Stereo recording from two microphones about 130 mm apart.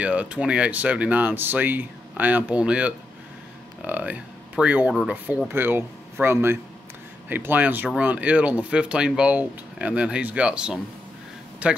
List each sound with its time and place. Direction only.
0.0 s speech: 10° right (ahead or behind)